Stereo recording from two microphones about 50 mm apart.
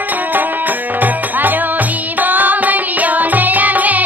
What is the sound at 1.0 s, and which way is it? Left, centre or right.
Music, right.